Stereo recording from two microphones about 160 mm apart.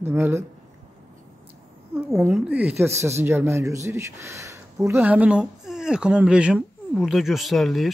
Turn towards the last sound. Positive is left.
turn(degrees=0)  # may be behind; listen again after turning